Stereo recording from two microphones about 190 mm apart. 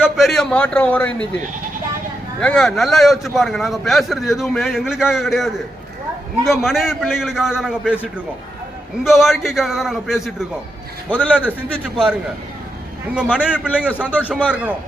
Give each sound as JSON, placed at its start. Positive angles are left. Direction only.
{"t": 0.0, "sound": "a man's voice", "side_deg": 0}
{"t": 2.4, "sound": "a man's voice", "side_deg": 5}
{"t": 9.0, "sound": "a man's voice", "side_deg": 0}
{"t": 13.3, "sound": "a man's voice", "side_deg": -5}